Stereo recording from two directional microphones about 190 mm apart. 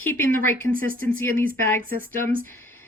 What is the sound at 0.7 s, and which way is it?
Speech, 45° right (ahead or behind).